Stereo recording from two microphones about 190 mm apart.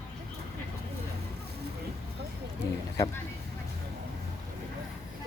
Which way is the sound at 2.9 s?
20° left (ahead or behind).